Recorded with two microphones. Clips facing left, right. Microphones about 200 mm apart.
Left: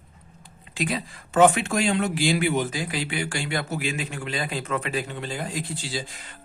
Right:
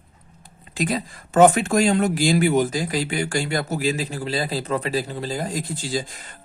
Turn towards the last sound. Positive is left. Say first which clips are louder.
# right 5 dB
turn(degrees=-45)  # may be behind; listen again after turning